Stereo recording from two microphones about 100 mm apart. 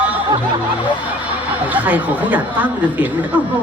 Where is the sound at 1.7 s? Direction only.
15° right (ahead or behind).